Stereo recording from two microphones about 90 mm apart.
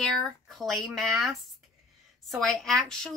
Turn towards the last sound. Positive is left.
turn(degrees=5)  # may be behind; listen again after turning